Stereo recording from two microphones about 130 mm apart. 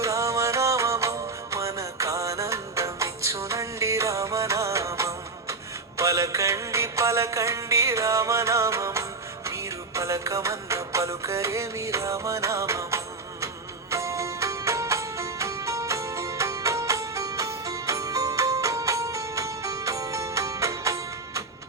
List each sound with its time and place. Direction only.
0.0 s music: 25° right (ahead or behind)